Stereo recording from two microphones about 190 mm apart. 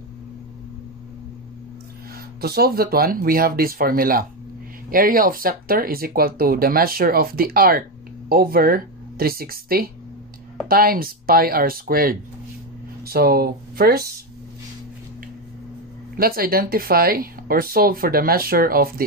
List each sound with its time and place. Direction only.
2.4 s speech: 55° right (ahead or behind)
16.2 s speech: 50° right (ahead or behind)